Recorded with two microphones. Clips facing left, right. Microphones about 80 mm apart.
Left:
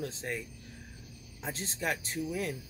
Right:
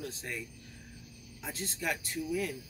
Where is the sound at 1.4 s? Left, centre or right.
Left.